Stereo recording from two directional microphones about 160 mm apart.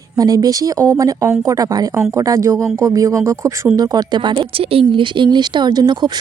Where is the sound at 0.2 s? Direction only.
20° right (ahead or behind).